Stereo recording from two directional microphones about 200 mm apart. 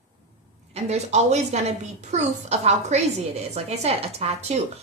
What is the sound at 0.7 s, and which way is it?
A woman's voice, 35° right (ahead or behind).